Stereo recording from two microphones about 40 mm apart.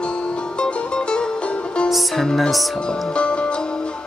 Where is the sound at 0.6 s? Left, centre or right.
Left.